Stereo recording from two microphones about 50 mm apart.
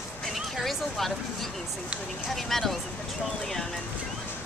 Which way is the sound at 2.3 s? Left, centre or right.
Centre.